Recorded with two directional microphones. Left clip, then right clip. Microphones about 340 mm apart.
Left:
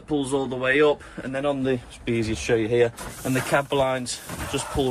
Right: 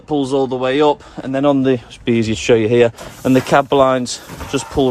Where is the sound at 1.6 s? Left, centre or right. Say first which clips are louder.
Right 9 dB; right.